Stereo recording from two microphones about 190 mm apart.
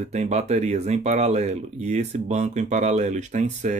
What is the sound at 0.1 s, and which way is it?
Speech, 35° right (ahead or behind).